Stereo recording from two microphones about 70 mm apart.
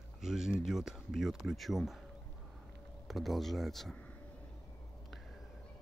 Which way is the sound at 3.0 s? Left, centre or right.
Centre.